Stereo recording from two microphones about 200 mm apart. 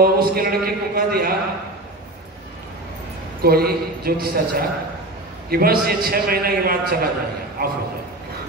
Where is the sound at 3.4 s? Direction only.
50° right (ahead or behind).